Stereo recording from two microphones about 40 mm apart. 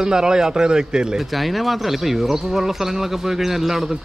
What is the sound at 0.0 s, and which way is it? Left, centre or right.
Speech, centre.